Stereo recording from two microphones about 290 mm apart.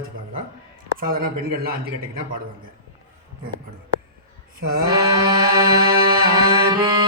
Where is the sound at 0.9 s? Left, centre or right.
Right.